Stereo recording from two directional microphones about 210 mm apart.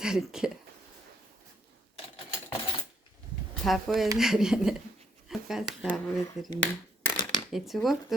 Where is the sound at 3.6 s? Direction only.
Centre (ahead or behind).